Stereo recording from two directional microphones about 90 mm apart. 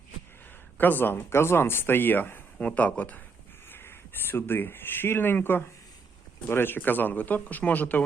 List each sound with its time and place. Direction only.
0.8 s speech: 20° left (ahead or behind)